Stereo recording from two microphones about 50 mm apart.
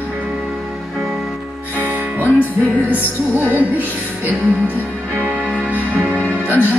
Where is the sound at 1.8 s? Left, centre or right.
Right.